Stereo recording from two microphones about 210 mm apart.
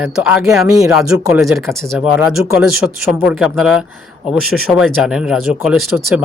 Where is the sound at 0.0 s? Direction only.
5° right (ahead or behind).